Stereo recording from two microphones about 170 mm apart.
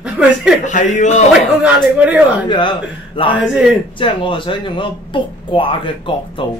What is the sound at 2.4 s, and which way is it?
Speech, 25° left (ahead or behind).